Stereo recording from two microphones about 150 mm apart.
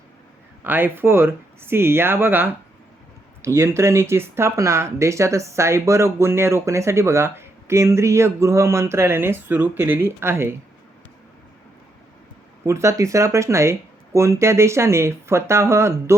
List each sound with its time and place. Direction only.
0.6 s speech: 15° right (ahead or behind)
12.6 s speech: 20° right (ahead or behind)